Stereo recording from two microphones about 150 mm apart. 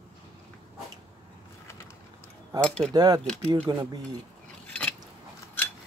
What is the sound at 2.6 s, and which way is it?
Speech, 5° left (ahead or behind).